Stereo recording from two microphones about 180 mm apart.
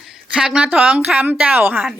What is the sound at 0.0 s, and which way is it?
A woman's voice, 5° right (ahead or behind).